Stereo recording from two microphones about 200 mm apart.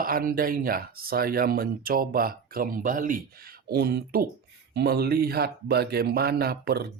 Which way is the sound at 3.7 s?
50° right (ahead or behind).